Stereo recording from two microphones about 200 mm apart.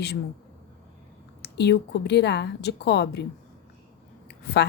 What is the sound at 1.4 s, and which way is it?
Speech, 55° left (ahead or behind).